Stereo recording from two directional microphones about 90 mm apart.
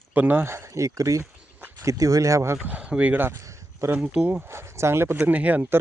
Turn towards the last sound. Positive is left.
turn(degrees=-20)  # may be behind; listen again after turning